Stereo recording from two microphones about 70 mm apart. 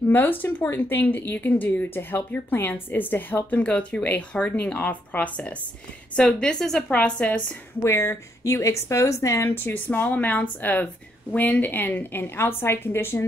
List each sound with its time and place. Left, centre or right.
0.1 s speech: left
6.1 s a woman's voice: centre
6.9 s speech: centre
7.8 s speech: left